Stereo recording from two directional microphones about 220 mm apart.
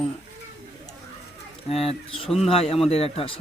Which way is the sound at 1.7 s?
25° left (ahead or behind).